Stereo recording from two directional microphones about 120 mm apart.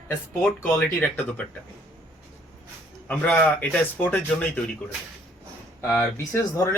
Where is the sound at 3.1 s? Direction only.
15° left (ahead or behind).